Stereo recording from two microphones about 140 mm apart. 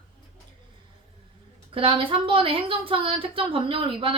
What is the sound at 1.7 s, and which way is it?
Speech, 40° right (ahead or behind).